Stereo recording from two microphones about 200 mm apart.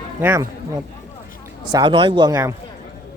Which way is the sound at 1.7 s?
25° right (ahead or behind).